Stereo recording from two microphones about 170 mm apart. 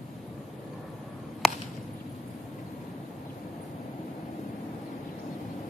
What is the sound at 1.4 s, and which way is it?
Chop, centre (ahead or behind).